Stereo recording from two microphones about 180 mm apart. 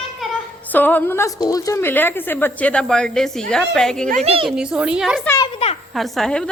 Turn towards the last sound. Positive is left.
turn(degrees=5)  # may be behind; listen again after turning